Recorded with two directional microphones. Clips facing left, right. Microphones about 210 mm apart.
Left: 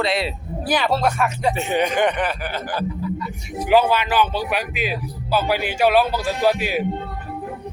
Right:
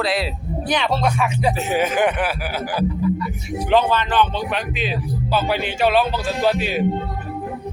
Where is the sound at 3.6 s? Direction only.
10° left (ahead or behind).